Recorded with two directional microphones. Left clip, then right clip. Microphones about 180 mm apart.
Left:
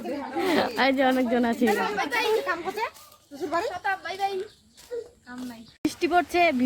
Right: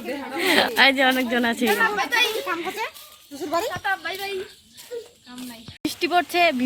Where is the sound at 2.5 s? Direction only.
55° right (ahead or behind).